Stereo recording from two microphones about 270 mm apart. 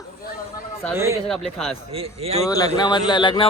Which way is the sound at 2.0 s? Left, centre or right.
Right.